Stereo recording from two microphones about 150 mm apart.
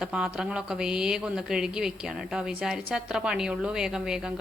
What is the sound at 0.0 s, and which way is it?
A woman's voice, 5° right (ahead or behind).